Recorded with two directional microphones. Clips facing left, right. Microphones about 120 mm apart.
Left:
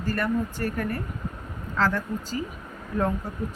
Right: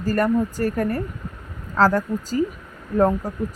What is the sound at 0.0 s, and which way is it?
Speech, 40° right (ahead or behind).